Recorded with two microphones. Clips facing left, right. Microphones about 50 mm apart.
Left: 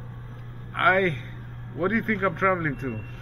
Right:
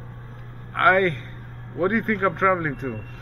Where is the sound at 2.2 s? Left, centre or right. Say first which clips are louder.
Right 4 dB; right.